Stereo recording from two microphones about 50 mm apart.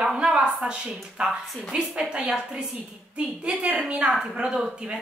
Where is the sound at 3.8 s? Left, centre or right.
Right.